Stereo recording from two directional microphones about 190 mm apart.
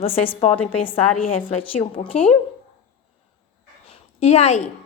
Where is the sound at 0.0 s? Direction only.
30° left (ahead or behind).